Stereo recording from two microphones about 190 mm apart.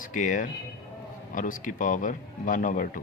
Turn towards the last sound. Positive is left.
turn(degrees=45)  # may be behind; listen again after turning